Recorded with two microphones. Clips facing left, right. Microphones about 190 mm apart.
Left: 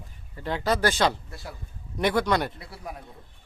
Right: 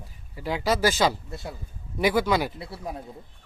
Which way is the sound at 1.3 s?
25° right (ahead or behind).